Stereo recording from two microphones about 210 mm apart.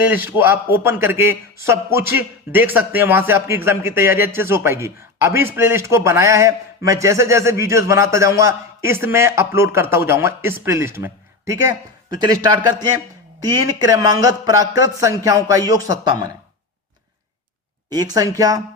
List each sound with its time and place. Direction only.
0.1 s a man's voice: 10° right (ahead or behind)
17.9 s a man's voice: 20° right (ahead or behind)